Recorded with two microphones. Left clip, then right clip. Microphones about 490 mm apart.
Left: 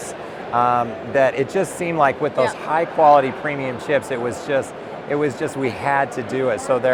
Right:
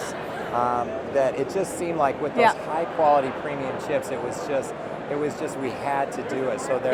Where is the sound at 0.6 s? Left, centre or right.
Left.